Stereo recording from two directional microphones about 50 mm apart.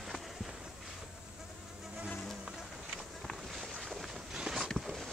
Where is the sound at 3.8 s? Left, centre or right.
Centre.